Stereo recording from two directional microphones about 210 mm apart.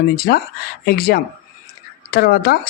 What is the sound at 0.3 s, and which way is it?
Speech, 50° left (ahead or behind).